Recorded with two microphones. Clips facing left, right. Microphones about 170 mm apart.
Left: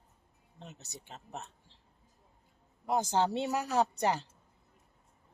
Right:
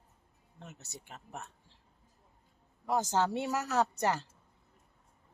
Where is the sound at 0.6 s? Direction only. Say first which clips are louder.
Even; 20° left (ahead or behind).